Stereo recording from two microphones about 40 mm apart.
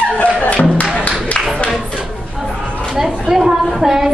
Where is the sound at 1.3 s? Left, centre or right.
Centre.